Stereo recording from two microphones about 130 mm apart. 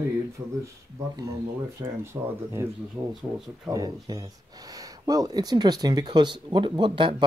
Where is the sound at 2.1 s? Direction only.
30° right (ahead or behind).